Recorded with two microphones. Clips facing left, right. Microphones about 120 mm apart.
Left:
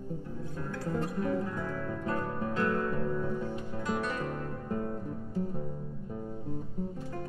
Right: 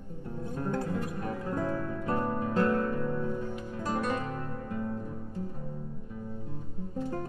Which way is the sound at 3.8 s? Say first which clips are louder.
Right 3 dB; 45° right (ahead or behind).